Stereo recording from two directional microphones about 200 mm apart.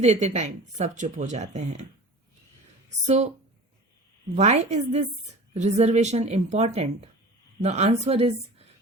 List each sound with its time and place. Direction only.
0.0 s speech: 35° right (ahead or behind)
4.4 s speech: 35° right (ahead or behind)